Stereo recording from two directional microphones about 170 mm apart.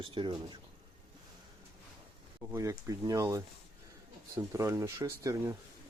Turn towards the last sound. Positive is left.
turn(degrees=-20)  # may be behind; listen again after turning